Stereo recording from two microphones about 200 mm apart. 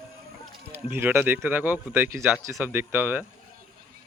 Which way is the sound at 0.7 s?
10° right (ahead or behind).